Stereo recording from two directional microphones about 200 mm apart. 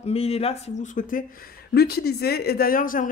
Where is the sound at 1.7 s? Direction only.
50° left (ahead or behind).